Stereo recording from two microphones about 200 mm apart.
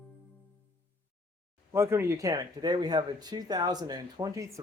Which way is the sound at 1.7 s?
10° right (ahead or behind).